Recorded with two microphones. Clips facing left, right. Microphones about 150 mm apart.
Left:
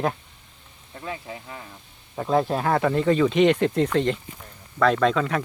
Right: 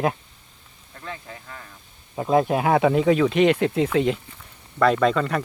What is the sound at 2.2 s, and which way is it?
Speech, 10° right (ahead or behind).